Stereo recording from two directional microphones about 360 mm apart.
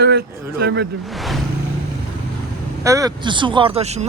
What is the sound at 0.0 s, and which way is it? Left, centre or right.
Speech, right.